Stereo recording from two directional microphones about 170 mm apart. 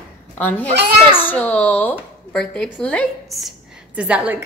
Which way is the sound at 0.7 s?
75° right (ahead or behind).